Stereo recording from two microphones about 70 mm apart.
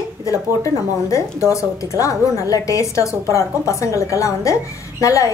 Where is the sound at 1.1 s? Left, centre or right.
Left.